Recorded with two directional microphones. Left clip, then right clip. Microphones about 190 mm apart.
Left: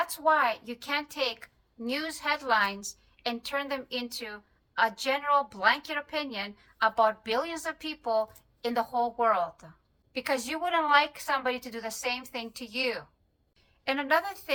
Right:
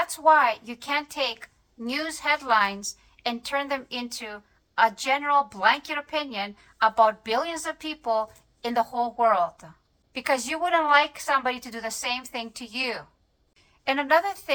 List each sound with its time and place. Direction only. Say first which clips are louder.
0.1 s a woman's voice: right 9 dB; 15° right (ahead or behind)